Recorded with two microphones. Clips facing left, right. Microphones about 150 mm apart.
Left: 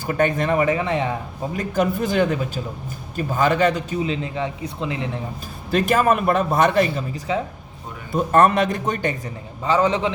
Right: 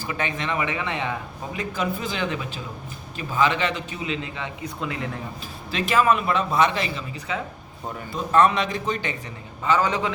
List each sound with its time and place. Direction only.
0.0 s a man's voice: 50° left (ahead or behind)
1.5 s a man's voice: 50° left (ahead or behind); by 5.0 s 25° left (ahead or behind)
5.7 s a man's voice: 50° left (ahead or behind)
9.6 s a man's voice: 30° left (ahead or behind)